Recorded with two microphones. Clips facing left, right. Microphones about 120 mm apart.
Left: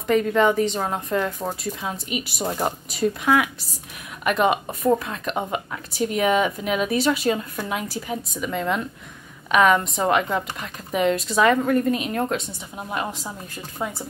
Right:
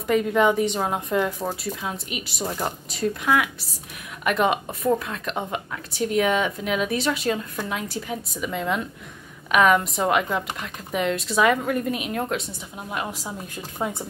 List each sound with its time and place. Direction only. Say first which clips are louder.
0.0 s a woman's voice: left 1 dB; 5° right (ahead or behind)
1.4 s a woman's voice: even; centre (ahead or behind)
13.7 s speech: right 1 dB; 20° right (ahead or behind)